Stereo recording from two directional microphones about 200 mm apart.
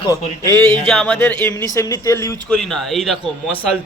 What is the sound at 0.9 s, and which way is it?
Speech, 5° left (ahead or behind).